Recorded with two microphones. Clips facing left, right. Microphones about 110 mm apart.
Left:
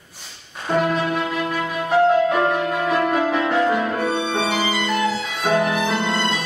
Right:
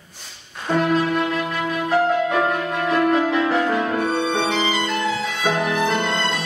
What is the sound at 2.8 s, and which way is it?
Music, centre (ahead or behind).